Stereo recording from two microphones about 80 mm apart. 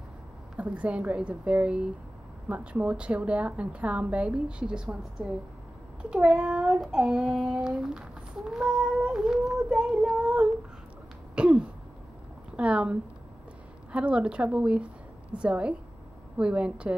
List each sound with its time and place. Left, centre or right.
0.6 s a woman's voice: centre
11.3 s throat clearing: centre
12.5 s a woman's voice: centre